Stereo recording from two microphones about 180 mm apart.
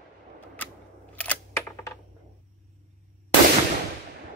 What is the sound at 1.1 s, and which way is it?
Camera, 10° left (ahead or behind).